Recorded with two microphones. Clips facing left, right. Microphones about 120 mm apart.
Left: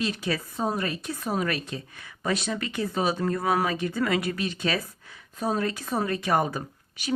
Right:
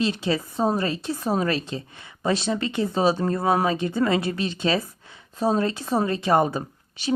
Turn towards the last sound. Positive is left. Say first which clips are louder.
# right 5 dB
turn(degrees=-25)  # may be behind; listen again after turning